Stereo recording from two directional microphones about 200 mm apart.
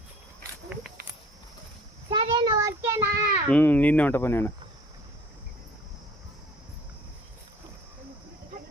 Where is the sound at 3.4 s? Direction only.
5° left (ahead or behind).